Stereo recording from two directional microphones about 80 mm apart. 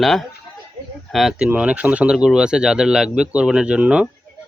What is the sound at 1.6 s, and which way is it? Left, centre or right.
Speech, centre.